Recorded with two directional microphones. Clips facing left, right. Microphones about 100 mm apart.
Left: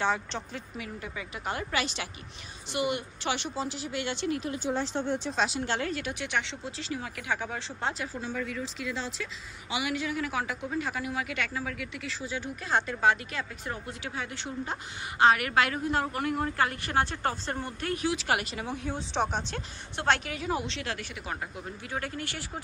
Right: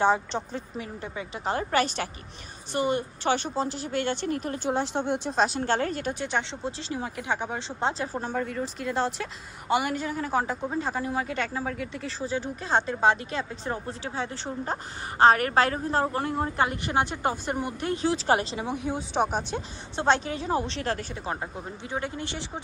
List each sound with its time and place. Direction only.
0.0 s a woman's voice: 35° right (ahead or behind); by 5.3 s 65° right (ahead or behind)
5.3 s a woman's voice: 40° right (ahead or behind); by 8.1 s 25° right (ahead or behind)
8.1 s a woman's voice: 50° right (ahead or behind); by 19.6 s 10° right (ahead or behind)
20.0 s a woman's voice: 30° right (ahead or behind)